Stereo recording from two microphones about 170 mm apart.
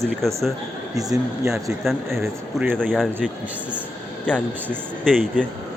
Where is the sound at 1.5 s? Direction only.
Centre (ahead or behind).